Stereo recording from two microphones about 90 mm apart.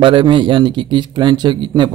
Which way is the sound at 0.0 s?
65° right (ahead or behind).